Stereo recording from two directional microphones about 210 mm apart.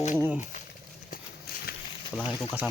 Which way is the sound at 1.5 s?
45° left (ahead or behind).